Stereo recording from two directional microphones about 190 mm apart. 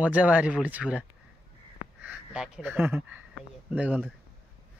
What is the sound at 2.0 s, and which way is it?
Speech, 5° right (ahead or behind).